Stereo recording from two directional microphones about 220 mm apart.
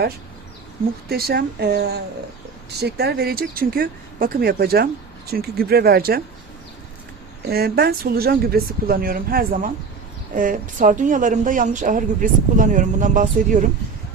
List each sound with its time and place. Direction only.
1.0 s speech: 45° right (ahead or behind)
7.4 s speech: 45° right (ahead or behind)